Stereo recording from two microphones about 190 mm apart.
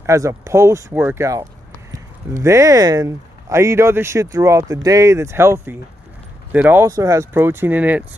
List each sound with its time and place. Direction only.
0.0 s speech: 15° right (ahead or behind)